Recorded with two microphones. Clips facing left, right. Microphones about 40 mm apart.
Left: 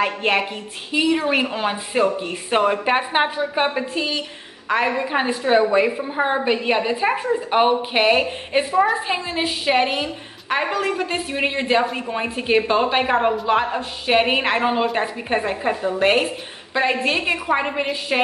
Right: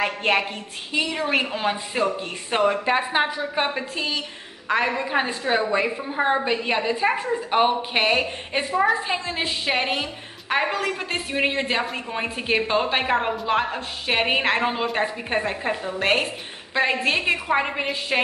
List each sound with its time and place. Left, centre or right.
0.0 s a woman's voice: centre; by 3.4 s left
3.5 s a woman's voice: centre